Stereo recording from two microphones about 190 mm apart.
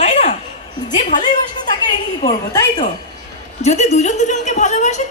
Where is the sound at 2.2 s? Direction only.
20° left (ahead or behind).